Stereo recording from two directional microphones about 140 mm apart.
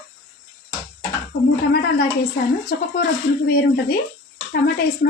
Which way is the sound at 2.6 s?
90° left.